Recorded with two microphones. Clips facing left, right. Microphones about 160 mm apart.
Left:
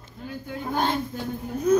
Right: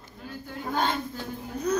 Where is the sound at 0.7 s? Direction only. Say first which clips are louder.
Left 2 dB; 15° left (ahead or behind).